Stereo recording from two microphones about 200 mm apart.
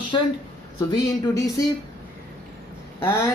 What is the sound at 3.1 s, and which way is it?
Speech, 10° left (ahead or behind).